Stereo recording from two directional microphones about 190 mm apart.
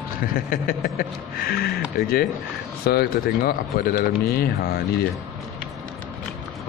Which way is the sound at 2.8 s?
55° left (ahead or behind).